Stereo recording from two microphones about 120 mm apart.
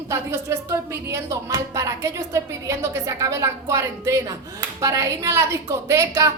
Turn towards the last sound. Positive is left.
turn(degrees=-25)  # may be behind; listen again after turning